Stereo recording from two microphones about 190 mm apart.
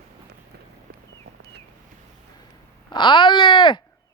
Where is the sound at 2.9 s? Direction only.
25° left (ahead or behind).